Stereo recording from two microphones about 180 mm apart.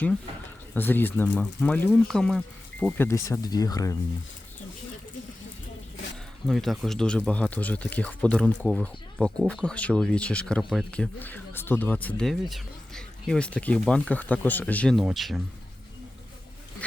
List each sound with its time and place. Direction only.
0.7 s speech: 10° left (ahead or behind)
2.8 s speech: 15° left (ahead or behind)
6.5 s speech: centre (ahead or behind)